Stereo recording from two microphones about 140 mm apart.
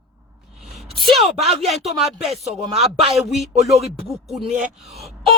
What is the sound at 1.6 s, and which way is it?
Speech, centre (ahead or behind).